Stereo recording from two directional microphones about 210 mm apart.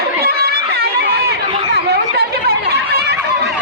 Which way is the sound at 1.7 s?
50° right (ahead or behind).